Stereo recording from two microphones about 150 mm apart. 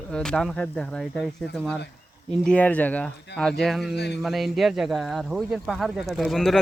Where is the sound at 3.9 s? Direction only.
90° left.